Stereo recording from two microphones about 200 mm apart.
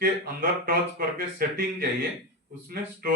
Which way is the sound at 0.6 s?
45° right (ahead or behind).